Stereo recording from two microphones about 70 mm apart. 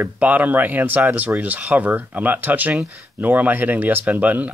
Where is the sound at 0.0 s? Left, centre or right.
Right.